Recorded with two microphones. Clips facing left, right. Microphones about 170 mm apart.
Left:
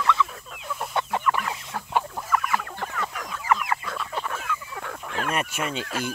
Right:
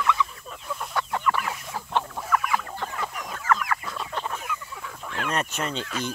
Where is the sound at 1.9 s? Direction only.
5° left (ahead or behind).